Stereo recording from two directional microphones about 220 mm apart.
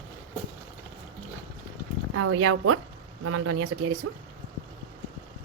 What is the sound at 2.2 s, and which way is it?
Speech, 75° right (ahead or behind).